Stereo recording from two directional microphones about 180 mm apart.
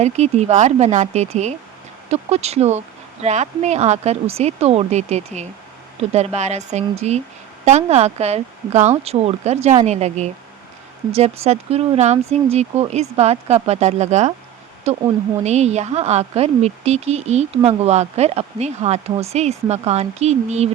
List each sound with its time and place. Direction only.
0.0 s a woman's voice: 40° right (ahead or behind)